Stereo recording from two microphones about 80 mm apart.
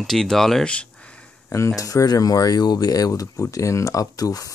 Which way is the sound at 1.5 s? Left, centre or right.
Left.